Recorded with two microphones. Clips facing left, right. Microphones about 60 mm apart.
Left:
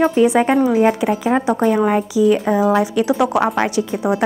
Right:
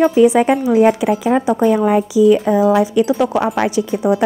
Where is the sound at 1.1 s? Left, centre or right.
Centre.